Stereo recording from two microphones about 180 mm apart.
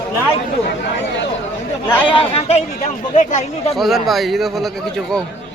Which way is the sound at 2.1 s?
30° left (ahead or behind).